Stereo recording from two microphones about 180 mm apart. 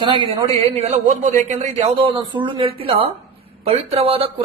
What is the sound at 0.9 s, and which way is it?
A man's voice, 45° right (ahead or behind).